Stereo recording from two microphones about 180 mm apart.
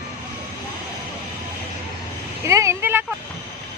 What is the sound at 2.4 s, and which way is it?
Vehicle, 15° right (ahead or behind).